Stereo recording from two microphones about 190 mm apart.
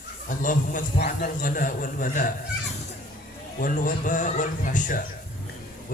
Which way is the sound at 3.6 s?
45° left (ahead or behind).